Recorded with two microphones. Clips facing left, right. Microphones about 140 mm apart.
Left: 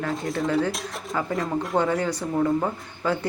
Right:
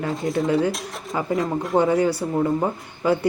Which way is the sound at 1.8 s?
10° right (ahead or behind).